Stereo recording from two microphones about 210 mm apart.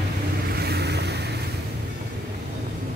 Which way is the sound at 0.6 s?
50° right (ahead or behind).